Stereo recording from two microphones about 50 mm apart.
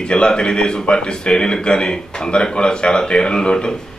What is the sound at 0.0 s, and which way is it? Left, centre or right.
A man's voice, centre.